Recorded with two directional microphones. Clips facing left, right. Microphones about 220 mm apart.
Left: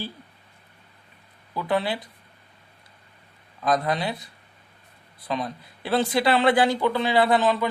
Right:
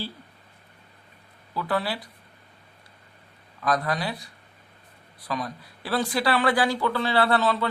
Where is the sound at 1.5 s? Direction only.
20° left (ahead or behind).